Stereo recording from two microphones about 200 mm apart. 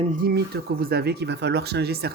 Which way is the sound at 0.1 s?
45° right (ahead or behind).